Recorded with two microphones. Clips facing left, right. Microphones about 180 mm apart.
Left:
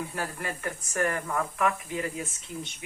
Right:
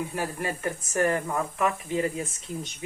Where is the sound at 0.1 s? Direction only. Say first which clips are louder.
Right 4 dB; 20° right (ahead or behind).